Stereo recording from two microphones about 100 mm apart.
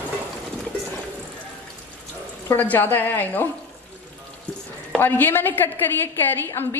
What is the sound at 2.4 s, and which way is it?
A woman's voice, 20° left (ahead or behind).